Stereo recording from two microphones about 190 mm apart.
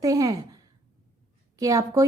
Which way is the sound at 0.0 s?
20° right (ahead or behind).